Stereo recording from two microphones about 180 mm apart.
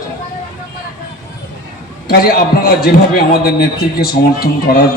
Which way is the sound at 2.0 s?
60° left (ahead or behind).